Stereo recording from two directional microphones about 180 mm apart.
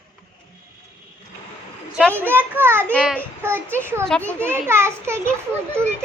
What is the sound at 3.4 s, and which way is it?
Speech, 15° right (ahead or behind).